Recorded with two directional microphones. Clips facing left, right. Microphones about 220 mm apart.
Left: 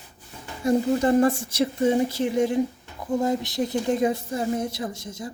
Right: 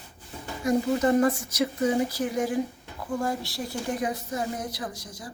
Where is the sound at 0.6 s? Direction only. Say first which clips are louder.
Left 2 dB; 30° left (ahead or behind).